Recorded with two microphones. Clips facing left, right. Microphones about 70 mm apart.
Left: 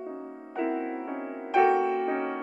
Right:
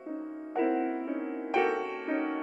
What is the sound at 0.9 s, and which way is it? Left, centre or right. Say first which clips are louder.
Music: right 1 dB; centre.